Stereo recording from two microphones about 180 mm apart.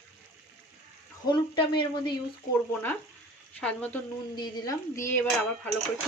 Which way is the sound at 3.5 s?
5° left (ahead or behind).